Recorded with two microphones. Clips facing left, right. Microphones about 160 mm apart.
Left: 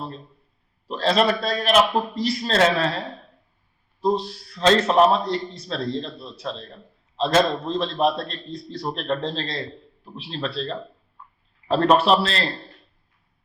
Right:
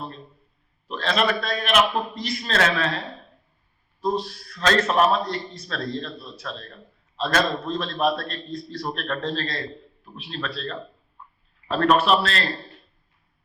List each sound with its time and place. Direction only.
0.9 s a man's voice: 35° left (ahead or behind)
4.0 s a man's voice: 30° left (ahead or behind)